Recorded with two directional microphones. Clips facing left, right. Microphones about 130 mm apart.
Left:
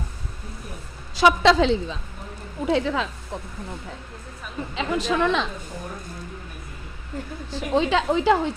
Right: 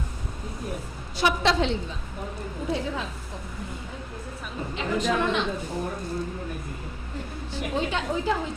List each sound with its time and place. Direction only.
1.1 s a woman's voice: 90° left
4.7 s a woman's voice: 90° left
7.5 s a woman's voice: 90° left